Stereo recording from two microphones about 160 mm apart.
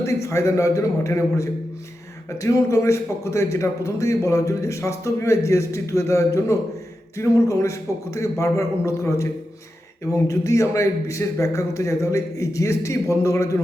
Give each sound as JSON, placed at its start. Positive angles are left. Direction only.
{"t": 0.0, "sound": "a man's voice", "side_deg": 20}